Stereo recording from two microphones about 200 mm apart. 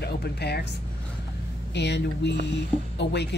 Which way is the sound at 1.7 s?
60° left (ahead or behind).